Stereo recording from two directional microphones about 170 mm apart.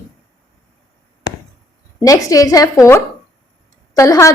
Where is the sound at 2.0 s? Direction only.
20° left (ahead or behind).